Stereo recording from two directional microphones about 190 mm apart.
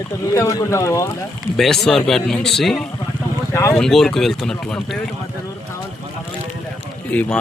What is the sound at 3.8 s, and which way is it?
Speech, centre (ahead or behind).